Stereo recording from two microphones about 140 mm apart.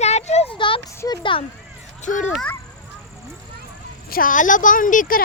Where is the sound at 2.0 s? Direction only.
60° left (ahead or behind).